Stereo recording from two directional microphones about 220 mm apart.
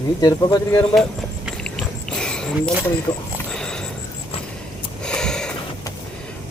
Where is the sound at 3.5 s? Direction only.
5° left (ahead or behind).